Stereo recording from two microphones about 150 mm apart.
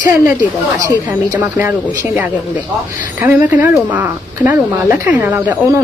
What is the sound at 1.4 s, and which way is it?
Speech, 15° right (ahead or behind).